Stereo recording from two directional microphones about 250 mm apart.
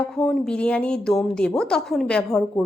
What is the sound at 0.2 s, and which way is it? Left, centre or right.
Speech, centre.